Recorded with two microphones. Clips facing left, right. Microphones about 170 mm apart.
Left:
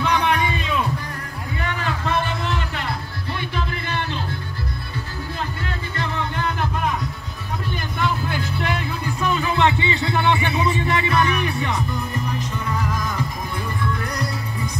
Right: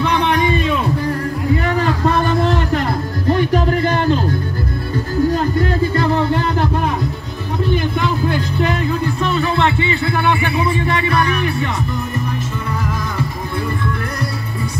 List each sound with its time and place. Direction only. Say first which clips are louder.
0.1 s a sound: right 2 dB; 10° left (ahead or behind)
1.6 s music: right 9 dB; 35° right (ahead or behind)
9.0 s speech: right 5 dB; 10° left (ahead or behind)